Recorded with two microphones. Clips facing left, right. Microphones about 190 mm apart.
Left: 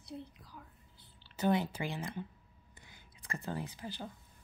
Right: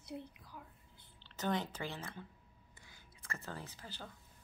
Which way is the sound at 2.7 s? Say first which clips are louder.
Left 3 dB; 20° left (ahead or behind).